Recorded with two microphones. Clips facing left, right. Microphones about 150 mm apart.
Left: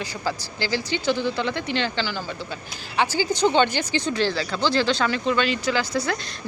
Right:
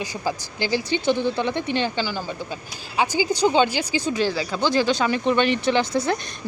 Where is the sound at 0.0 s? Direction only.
15° right (ahead or behind).